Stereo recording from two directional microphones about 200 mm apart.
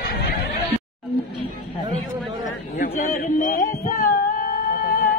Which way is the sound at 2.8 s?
45° left (ahead or behind).